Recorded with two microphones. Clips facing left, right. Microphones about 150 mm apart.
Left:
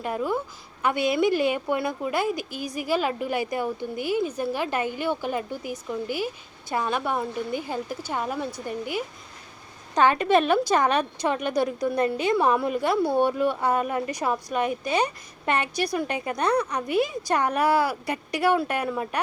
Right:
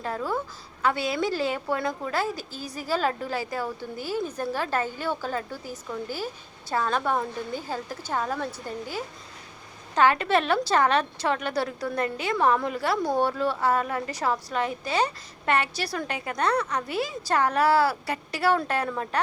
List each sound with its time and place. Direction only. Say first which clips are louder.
0.0 s a woman's voice: left 2 dB; 15° left (ahead or behind)